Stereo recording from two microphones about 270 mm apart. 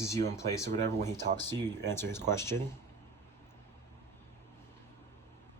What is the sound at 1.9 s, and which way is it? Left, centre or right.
Speech, centre.